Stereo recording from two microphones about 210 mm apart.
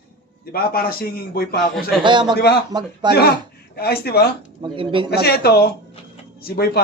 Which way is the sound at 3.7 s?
50° left (ahead or behind).